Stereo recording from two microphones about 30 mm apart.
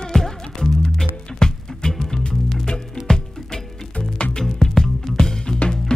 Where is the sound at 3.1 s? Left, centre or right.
Left.